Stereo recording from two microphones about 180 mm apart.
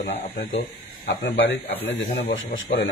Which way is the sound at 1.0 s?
90° left.